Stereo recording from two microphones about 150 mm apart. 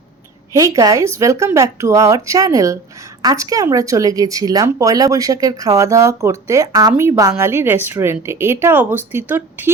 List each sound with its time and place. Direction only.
0.5 s speech: 20° right (ahead or behind)